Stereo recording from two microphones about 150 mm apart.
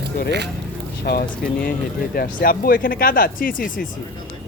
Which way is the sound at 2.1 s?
75° left (ahead or behind).